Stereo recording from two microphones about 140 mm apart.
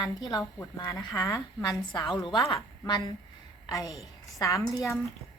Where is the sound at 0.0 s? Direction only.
25° left (ahead or behind).